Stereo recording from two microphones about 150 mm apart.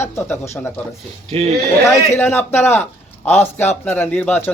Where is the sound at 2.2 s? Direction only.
15° left (ahead or behind).